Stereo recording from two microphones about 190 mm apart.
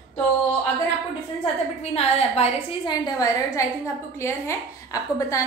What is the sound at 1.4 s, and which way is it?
A woman's voice, 35° left (ahead or behind).